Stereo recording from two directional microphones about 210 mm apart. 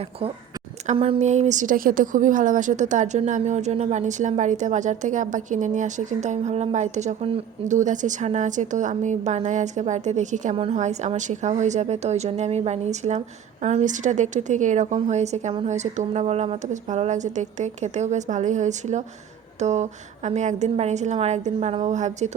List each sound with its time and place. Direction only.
0.9 s a woman's voice: 25° right (ahead or behind)